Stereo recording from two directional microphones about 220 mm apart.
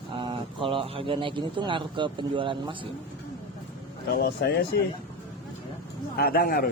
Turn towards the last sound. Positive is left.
turn(degrees=45)  # may be behind; listen again after turning